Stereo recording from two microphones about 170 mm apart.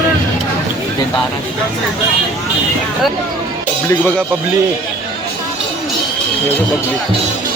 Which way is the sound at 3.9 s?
10° left (ahead or behind).